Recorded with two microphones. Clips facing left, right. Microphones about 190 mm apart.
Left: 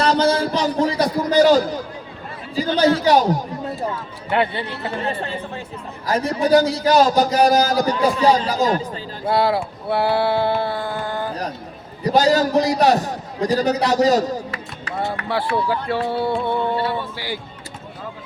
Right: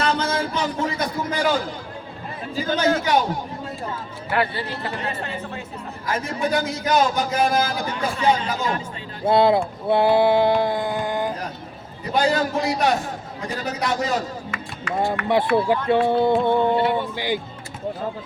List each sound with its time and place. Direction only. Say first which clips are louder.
0.0 s a sound: left 5 dB; 35° left (ahead or behind)
2.7 s a man's voice: left 5 dB; 35° left (ahead or behind)
4.3 s a man's voice: left 3 dB; 25° left (ahead or behind)
9.2 s speech: right 2 dB; 20° right (ahead or behind)
9.9 s a sound: right 2 dB; 20° right (ahead or behind)
12.1 s a man's voice: left 5 dB; 40° left (ahead or behind)
15.3 s speech: right 3 dB; 25° right (ahead or behind)